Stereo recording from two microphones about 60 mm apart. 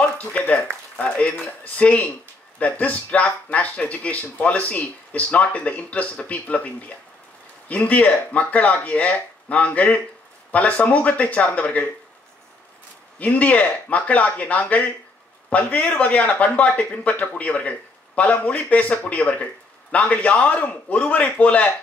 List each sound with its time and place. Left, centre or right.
0.0 s speech: left
13.2 s speech: left